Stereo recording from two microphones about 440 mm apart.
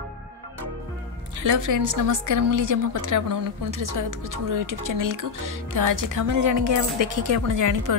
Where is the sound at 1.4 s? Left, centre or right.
Right.